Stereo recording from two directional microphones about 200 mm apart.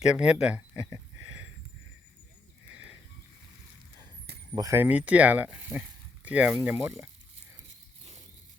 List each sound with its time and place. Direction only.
0.0 s speech: 5° right (ahead or behind)
4.5 s speech: 15° right (ahead or behind)